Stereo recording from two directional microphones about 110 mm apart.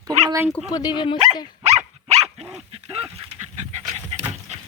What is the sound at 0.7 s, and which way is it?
Speech, 40° left (ahead or behind).